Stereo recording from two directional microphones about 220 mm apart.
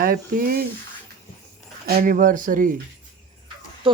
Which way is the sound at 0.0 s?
40° right (ahead or behind).